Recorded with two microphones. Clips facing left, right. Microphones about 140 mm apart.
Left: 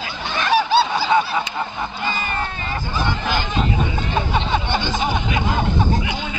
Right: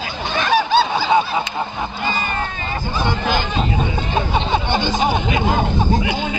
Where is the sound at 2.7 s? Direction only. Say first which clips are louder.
Right 3 dB; 30° right (ahead or behind).